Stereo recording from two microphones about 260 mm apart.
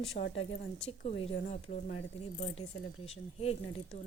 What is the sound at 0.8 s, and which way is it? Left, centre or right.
Speech, left.